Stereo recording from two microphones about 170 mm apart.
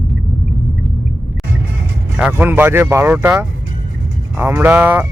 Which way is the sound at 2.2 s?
10° right (ahead or behind).